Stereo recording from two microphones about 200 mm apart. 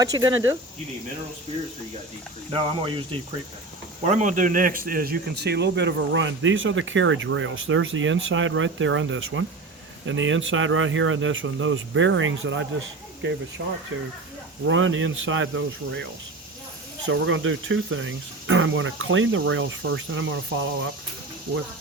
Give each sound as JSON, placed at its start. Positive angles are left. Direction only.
{"t": 0.0, "sound": "speech", "side_deg": -20}
{"t": 2.5, "sound": "speech", "side_deg": -25}
{"t": 4.0, "sound": "speech", "side_deg": -35}
{"t": 13.9, "sound": "speech", "side_deg": -75}
{"t": 17.1, "sound": "speech", "side_deg": -75}